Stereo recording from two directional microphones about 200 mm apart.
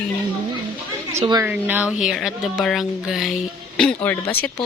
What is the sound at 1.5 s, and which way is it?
Speech, 10° right (ahead or behind).